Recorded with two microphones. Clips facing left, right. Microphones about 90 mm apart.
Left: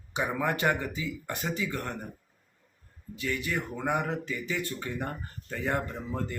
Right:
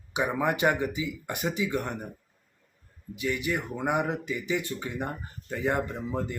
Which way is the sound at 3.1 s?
15° right (ahead or behind).